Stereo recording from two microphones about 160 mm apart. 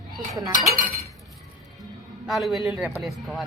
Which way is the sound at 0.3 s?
25° right (ahead or behind).